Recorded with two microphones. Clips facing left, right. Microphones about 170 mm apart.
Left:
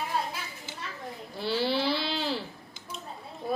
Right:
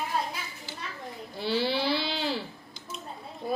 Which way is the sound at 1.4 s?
Centre (ahead or behind).